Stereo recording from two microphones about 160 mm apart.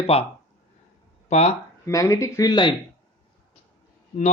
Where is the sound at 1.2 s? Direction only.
45° left (ahead or behind).